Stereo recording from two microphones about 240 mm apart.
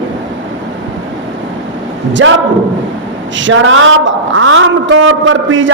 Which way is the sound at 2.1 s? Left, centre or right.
Right.